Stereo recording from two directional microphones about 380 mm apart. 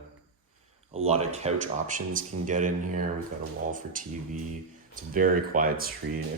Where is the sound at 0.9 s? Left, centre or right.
Centre.